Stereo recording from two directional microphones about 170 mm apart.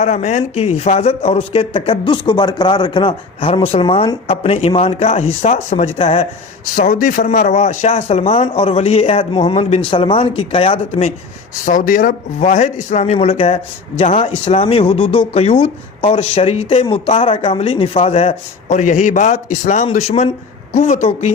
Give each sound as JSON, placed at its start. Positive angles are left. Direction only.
{"t": 0.0, "sound": "speech", "side_deg": 40}
{"t": 6.7, "sound": "speech", "side_deg": 50}
{"t": 11.6, "sound": "a woman's voice", "side_deg": 50}